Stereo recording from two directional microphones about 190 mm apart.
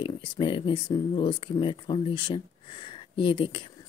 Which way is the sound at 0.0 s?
25° left (ahead or behind).